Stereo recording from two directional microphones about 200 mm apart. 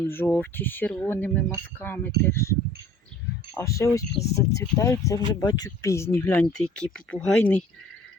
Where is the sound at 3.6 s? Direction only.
15° left (ahead or behind).